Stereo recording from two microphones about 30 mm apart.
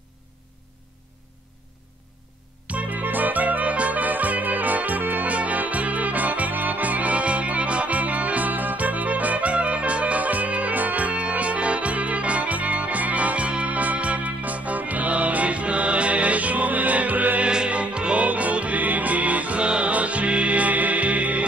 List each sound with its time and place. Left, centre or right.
2.6 s music: right
3.0 s music: right
5.3 s music: right
11.1 s music: right
13.5 s music: right
17.6 s music: right
18.2 s music: right
18.8 s music: right
19.6 s music: right
19.9 s music: right